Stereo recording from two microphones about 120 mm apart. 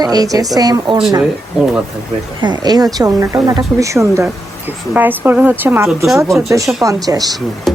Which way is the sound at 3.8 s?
25° right (ahead or behind).